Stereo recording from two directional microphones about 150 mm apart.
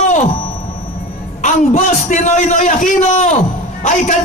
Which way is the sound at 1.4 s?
55° left (ahead or behind).